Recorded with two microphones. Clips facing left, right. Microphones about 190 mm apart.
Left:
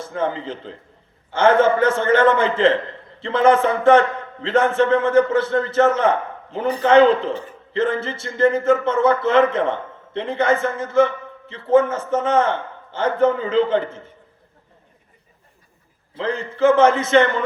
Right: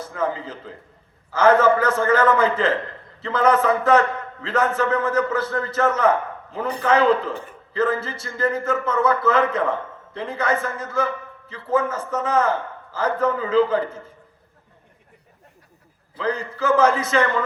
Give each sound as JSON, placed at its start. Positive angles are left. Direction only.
{"t": 0.0, "sound": "speech", "side_deg": 25}
{"t": 16.1, "sound": "speech", "side_deg": 25}